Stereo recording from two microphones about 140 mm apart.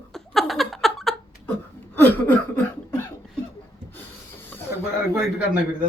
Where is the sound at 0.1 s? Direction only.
Centre (ahead or behind).